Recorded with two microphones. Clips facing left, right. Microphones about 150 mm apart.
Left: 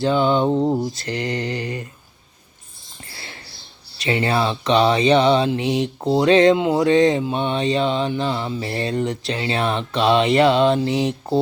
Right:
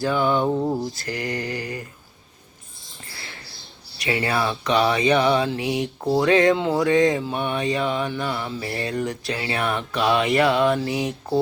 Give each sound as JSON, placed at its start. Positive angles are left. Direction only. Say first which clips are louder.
{"t": 0.0, "sound": "speech", "louder": "left 3 dB", "side_deg": 25}
{"t": 3.1, "sound": "rodents", "louder": "left 1 dB", "side_deg": 30}
{"t": 3.9, "sound": "speech", "louder": "left 3 dB", "side_deg": 25}